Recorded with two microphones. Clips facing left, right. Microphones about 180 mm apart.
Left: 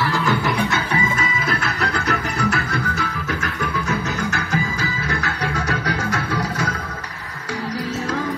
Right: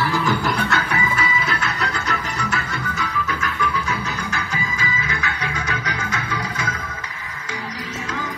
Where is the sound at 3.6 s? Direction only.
45° left (ahead or behind).